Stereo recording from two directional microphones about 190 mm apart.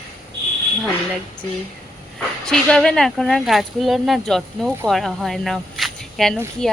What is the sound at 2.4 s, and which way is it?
Speech, 5° left (ahead or behind).